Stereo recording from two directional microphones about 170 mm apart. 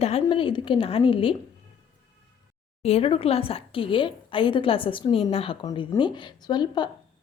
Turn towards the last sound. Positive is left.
turn(degrees=25)  # may be behind; listen again after turning